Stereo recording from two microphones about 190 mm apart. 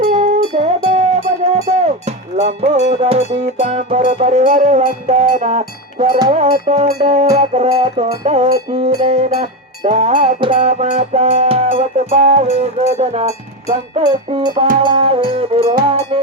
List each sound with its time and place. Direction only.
0.5 s music: 35° right (ahead or behind)